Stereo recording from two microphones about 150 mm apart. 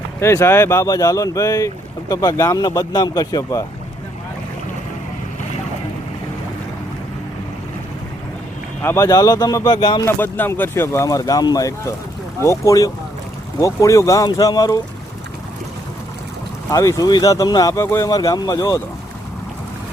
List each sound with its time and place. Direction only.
0.2 s speech: 20° left (ahead or behind)
8.8 s speech: 15° left (ahead or behind)
10.1 s speech: 15° left (ahead or behind)
16.6 s speech: 20° left (ahead or behind)